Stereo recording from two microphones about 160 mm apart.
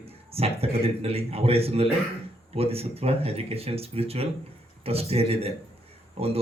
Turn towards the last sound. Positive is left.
turn(degrees=-40)  # may be behind; listen again after turning